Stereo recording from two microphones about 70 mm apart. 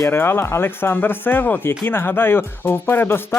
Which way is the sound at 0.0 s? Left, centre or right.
Left.